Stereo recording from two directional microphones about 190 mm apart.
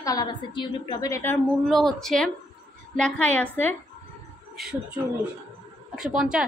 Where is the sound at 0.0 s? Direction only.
20° left (ahead or behind).